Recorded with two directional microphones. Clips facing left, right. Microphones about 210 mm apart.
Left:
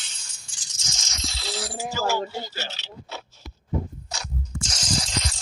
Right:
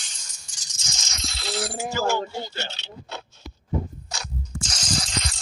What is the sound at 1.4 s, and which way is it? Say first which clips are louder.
Speech: right 4 dB; 55° right (ahead or behind).